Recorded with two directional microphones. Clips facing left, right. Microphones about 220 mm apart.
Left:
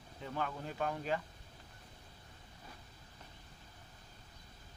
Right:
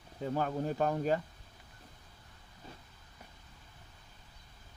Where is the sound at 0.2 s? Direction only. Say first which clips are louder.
Right 7 dB; 40° right (ahead or behind).